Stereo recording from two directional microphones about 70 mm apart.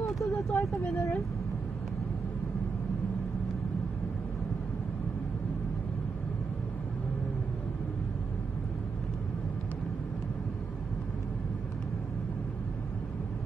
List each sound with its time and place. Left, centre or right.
0.0 s vehicle: left